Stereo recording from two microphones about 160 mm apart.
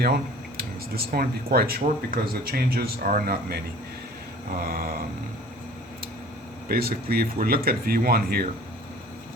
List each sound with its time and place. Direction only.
0.0 s speech: 75° right (ahead or behind)
6.7 s speech: 70° right (ahead or behind)